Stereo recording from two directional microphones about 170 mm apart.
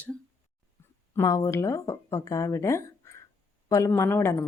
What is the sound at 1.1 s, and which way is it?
Speech, 20° left (ahead or behind).